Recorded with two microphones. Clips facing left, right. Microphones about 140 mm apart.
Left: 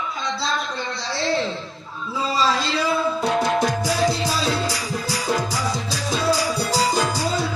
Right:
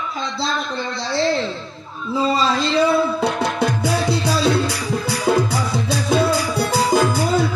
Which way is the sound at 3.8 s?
60° right (ahead or behind).